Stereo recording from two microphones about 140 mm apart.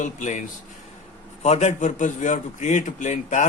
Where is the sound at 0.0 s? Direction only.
60° left (ahead or behind).